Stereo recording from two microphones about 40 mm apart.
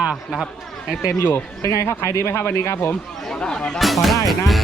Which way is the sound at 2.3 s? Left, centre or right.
Left.